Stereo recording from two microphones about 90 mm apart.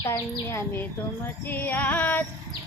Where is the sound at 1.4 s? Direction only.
20° left (ahead or behind).